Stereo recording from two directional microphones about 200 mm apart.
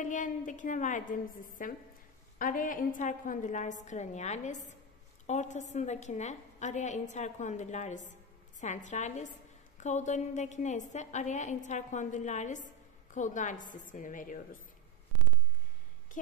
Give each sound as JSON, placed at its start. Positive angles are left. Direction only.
{"t": 0.0, "sound": "a woman's voice", "side_deg": 40}